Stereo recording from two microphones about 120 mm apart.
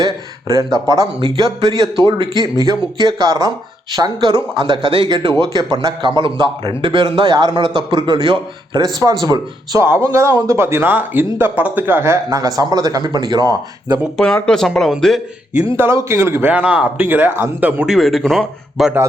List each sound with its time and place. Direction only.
0.0 s a man's voice: 30° right (ahead or behind)
9.8 s a man's voice: 20° right (ahead or behind)
14.2 s speech: 5° left (ahead or behind)
15.7 s speech: 20° right (ahead or behind)
17.8 s speech: centre (ahead or behind)